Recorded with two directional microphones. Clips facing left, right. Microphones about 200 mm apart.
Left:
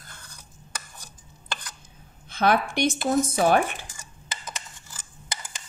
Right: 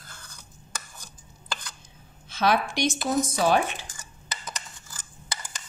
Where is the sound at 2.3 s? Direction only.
55° left (ahead or behind).